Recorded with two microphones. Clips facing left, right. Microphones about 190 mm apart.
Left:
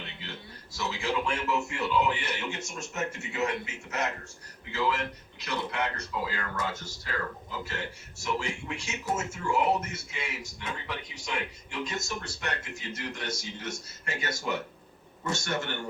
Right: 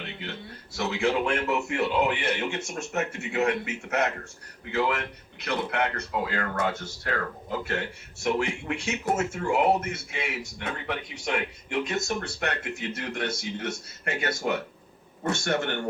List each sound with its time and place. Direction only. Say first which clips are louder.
0.2 s speech: right 5 dB; 60° right (ahead or behind)